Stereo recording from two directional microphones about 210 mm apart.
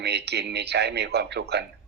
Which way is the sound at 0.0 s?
50° right (ahead or behind).